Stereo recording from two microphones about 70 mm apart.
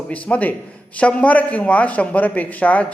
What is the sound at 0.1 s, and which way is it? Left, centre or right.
A man's voice, left.